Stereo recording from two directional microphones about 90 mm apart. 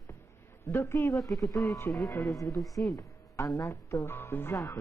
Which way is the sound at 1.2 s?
Centre (ahead or behind).